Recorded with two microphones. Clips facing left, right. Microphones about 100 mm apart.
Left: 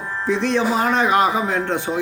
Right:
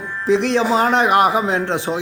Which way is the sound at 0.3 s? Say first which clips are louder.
Right 3 dB; 90° right.